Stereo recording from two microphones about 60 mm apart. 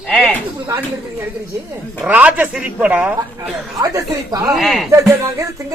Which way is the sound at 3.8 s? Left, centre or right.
Right.